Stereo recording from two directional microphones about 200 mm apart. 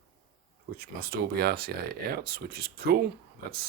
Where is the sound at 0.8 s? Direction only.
50° right (ahead or behind).